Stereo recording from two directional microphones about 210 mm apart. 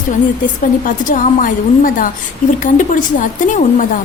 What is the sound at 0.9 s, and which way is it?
Speech, 40° left (ahead or behind).